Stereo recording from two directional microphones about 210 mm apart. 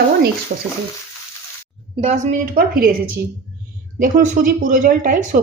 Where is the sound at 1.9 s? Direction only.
30° right (ahead or behind).